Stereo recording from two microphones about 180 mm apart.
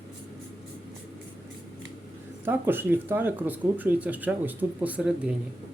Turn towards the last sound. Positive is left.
turn(degrees=-10)  # may be behind; listen again after turning